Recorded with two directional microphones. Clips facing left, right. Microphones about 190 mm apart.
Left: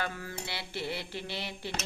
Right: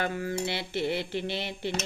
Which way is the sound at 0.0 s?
20° right (ahead or behind).